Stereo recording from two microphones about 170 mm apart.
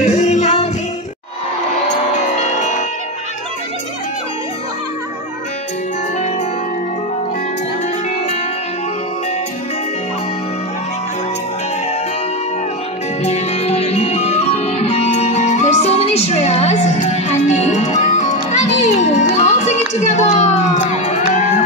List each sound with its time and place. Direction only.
0.0 s music: 40° left (ahead or behind)
13.2 s music: 40° left (ahead or behind)